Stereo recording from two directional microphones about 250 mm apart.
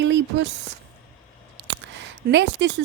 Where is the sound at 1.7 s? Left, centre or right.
Right.